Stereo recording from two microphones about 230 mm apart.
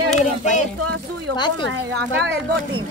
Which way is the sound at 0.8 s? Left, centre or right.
Right.